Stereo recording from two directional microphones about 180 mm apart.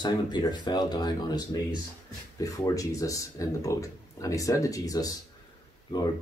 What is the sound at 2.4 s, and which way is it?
Speech, 20° left (ahead or behind).